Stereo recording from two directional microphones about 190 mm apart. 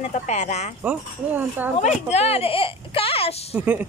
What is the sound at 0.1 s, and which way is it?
Speech, 35° left (ahead or behind).